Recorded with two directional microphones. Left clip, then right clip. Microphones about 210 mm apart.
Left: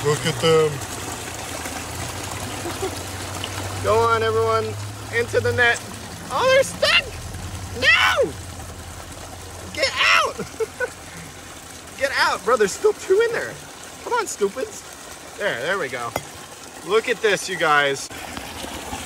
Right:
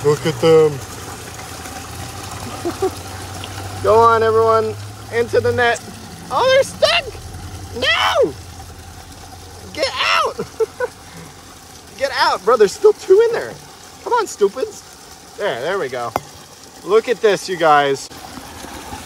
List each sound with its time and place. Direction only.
0.1 s speech: 40° right (ahead or behind)
3.8 s speech: 45° right (ahead or behind)
9.8 s speech: 35° right (ahead or behind)
10.8 s a sound: 30° right (ahead or behind)
12.0 s speech: 35° right (ahead or behind)
15.3 s speech: 30° right (ahead or behind)